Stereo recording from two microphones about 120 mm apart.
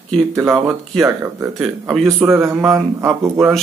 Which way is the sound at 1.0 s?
20° right (ahead or behind).